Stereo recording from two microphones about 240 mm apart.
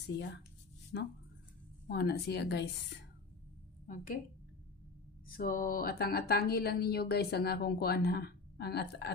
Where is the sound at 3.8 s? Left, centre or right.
Left.